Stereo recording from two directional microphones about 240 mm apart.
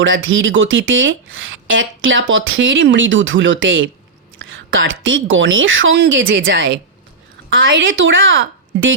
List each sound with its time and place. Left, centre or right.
0.0 s speech: right